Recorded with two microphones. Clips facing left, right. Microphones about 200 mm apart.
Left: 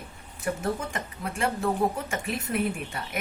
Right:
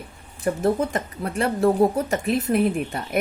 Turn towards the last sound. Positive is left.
turn(degrees=-35)  # may be behind; listen again after turning